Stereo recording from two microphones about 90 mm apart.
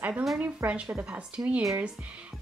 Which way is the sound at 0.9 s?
30° right (ahead or behind).